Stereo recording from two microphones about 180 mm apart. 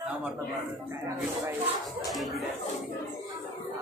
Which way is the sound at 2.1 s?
Centre (ahead or behind).